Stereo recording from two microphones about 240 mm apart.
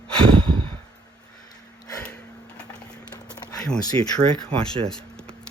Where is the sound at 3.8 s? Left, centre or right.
Centre.